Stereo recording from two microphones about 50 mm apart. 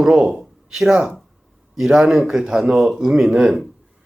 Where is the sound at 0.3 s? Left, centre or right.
Centre.